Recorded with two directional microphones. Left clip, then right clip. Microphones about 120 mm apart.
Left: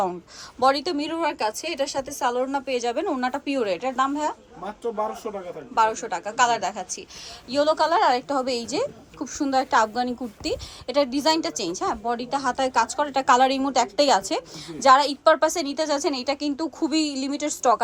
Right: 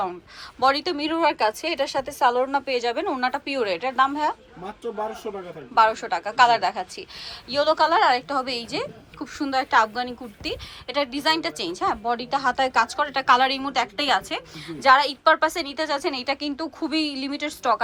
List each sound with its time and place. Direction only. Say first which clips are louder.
0.6 s a woman's voice: even; 30° left (ahead or behind)
5.7 s a woman's voice: right 3 dB; 25° left (ahead or behind)